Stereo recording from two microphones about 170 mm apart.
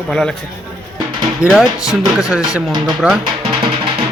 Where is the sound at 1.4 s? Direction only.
Centre (ahead or behind).